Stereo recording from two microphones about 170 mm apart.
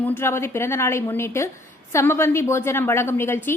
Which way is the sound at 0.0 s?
15° left (ahead or behind).